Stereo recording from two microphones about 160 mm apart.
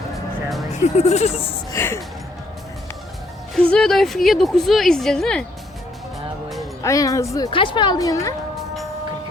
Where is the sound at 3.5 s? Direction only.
5° left (ahead or behind).